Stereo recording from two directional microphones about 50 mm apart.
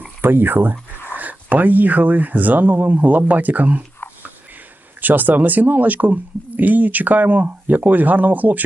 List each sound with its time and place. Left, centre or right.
0.2 s speech: right
4.0 s a sound: left
4.9 s speech: right